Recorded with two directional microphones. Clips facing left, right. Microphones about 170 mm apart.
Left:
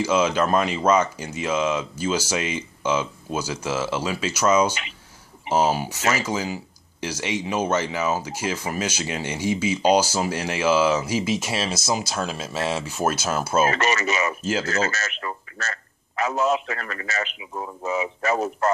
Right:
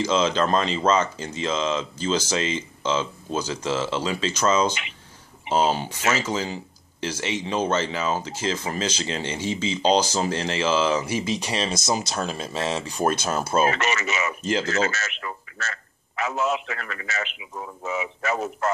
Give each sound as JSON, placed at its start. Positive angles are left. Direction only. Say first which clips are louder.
{"t": 0.0, "sound": "speech", "louder": "left 1 dB", "side_deg": 10}
{"t": 13.7, "sound": "a man's voice", "louder": "left 2 dB", "side_deg": 40}
{"t": 14.4, "sound": "speech", "louder": "even", "side_deg": 5}
{"t": 14.7, "sound": "a man's voice", "louder": "even", "side_deg": 40}